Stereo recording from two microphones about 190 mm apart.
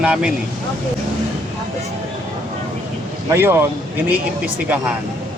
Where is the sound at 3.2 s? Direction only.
10° right (ahead or behind).